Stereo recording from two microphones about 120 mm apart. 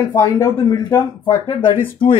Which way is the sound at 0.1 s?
20° left (ahead or behind).